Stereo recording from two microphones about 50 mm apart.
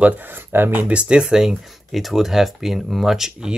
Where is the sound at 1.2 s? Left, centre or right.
Centre.